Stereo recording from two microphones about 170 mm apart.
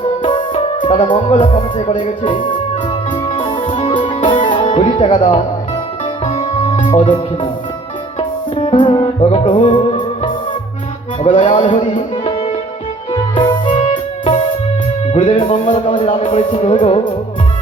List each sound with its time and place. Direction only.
0.2 s music: 30° left (ahead or behind)
0.9 s speech: 30° left (ahead or behind)
3.3 s music: 30° left (ahead or behind)
6.2 s music: 40° left (ahead or behind)
8.5 s music: 35° left (ahead or behind)
11.2 s music: 35° left (ahead or behind)
15.1 s music: 35° left (ahead or behind)